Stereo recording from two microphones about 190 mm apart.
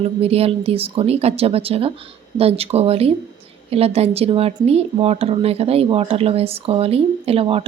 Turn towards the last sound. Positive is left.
turn(degrees=-30)  # may be behind; listen again after turning